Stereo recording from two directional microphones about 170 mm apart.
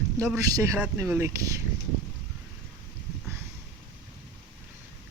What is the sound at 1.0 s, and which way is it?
Speech, 15° right (ahead or behind).